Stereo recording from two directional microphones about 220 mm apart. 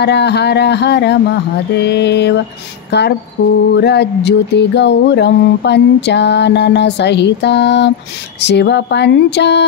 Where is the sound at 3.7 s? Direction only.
50° left (ahead or behind).